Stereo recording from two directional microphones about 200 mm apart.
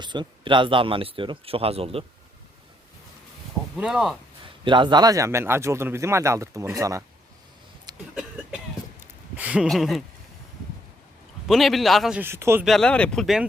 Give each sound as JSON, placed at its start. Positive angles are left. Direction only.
{"t": 0.0, "sound": "speech", "side_deg": -20}
{"t": 3.8, "sound": "speech", "side_deg": -5}
{"t": 4.6, "sound": "speech", "side_deg": -25}
{"t": 7.9, "sound": "a sound", "side_deg": -20}
{"t": 8.4, "sound": "a sound", "side_deg": -5}
{"t": 11.4, "sound": "speech", "side_deg": 0}
{"t": 12.6, "sound": "speech", "side_deg": 0}